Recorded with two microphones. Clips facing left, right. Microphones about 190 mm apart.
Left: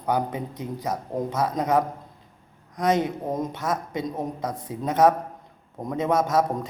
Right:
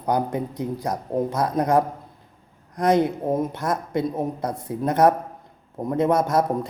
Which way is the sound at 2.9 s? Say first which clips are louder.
Right 5 dB; 10° right (ahead or behind).